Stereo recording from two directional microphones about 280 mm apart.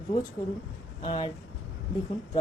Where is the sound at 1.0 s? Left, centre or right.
Centre.